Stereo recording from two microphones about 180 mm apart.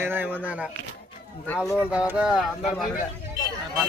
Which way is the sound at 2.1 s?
5° right (ahead or behind).